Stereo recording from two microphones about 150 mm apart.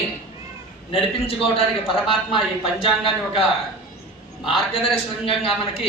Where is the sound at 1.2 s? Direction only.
40° left (ahead or behind).